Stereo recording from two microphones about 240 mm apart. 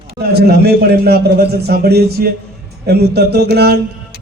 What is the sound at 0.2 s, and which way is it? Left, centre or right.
A man's voice, right.